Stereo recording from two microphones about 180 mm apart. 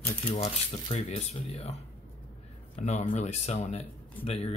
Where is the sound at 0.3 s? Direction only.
35° left (ahead or behind).